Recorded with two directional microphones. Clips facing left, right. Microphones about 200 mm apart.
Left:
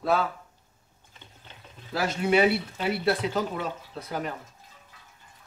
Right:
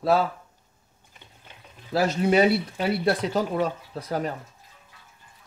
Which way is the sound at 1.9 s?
35° right (ahead or behind).